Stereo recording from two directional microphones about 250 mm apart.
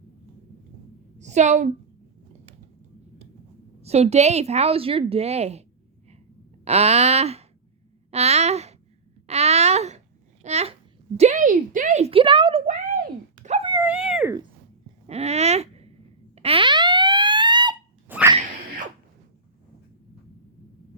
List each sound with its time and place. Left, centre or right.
1.2 s a woman's voice: right
3.8 s a woman's voice: right
6.7 s a woman's voice: right
9.2 s a sound: right
10.4 s a child's voice: right
13.4 s a sound: right
13.7 s dog: centre
15.0 s speech: right
16.3 s a sound: right